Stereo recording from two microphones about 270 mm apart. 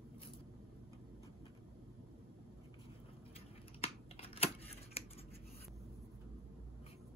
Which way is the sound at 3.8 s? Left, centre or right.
Left.